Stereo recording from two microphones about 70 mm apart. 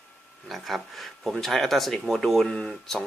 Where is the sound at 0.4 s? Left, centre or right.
Centre.